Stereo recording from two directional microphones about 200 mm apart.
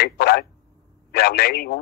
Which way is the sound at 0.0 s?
50° left (ahead or behind).